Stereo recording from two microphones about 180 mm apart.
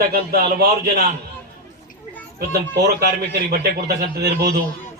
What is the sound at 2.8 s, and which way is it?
Speech, 65° right (ahead or behind).